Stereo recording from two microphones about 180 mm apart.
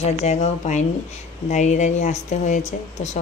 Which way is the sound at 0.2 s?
40° left (ahead or behind).